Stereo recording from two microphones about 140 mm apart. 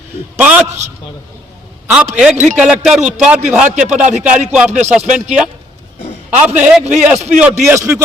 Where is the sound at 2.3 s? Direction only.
60° right (ahead or behind).